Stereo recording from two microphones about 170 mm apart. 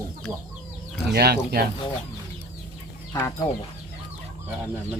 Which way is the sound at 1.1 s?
65° right (ahead or behind).